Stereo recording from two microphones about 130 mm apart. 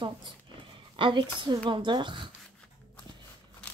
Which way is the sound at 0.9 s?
40° right (ahead or behind).